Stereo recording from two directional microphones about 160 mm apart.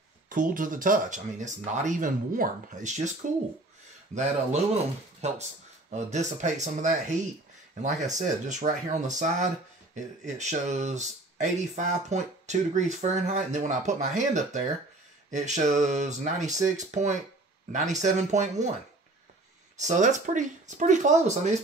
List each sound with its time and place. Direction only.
0.3 s speech: 55° right (ahead or behind)
19.8 s speech: 50° right (ahead or behind)